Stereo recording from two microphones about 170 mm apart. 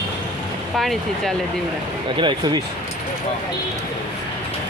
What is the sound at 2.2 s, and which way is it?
Speech, 25° right (ahead or behind).